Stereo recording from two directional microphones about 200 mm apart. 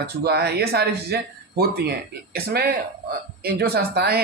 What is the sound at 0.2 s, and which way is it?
Speech, 55° right (ahead or behind).